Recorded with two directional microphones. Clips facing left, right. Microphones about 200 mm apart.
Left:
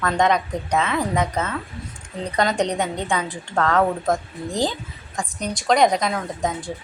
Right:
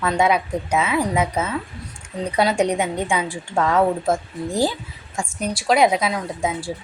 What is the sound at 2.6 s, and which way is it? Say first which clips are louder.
A woman's voice: right 2 dB; 10° right (ahead or behind).